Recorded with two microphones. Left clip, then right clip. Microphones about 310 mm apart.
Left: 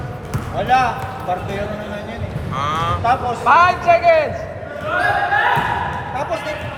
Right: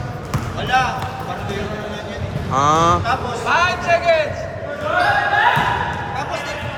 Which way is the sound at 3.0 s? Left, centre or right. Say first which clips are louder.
Left 5 dB; centre.